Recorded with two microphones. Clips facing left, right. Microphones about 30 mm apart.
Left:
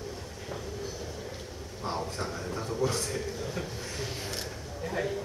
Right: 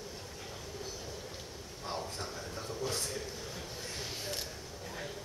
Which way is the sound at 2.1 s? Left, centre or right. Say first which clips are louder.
Left 6 dB; left.